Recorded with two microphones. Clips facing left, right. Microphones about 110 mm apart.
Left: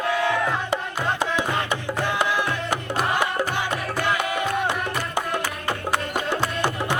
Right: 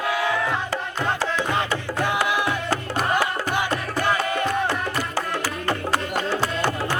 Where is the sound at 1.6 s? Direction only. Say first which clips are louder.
Right 1 dB; 15° right (ahead or behind).